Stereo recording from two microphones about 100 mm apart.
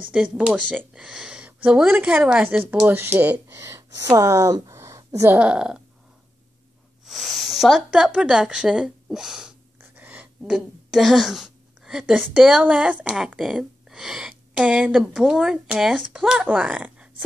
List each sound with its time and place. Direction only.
0.1 s speech: 10° right (ahead or behind)
0.7 s speech: 5° left (ahead or behind)
1.0 s speech: 10° right (ahead or behind)
3.5 s speech: 30° right (ahead or behind)
5.3 s speech: 10° right (ahead or behind)
7.1 s speech: centre (ahead or behind)
9.8 s a woman's voice: 20° right (ahead or behind)